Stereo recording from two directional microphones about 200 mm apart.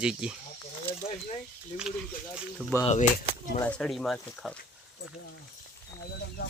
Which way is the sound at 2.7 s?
15° left (ahead or behind).